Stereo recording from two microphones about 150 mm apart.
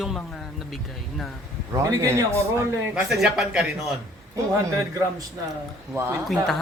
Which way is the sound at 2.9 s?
Centre (ahead or behind).